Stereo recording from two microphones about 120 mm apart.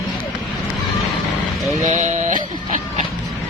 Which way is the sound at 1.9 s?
85° right.